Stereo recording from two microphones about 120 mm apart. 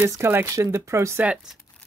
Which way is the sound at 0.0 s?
20° right (ahead or behind).